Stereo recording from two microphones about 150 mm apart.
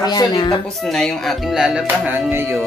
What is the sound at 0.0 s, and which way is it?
Speech, 25° left (ahead or behind).